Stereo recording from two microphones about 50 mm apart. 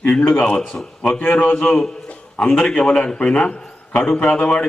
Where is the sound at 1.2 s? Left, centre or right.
Left.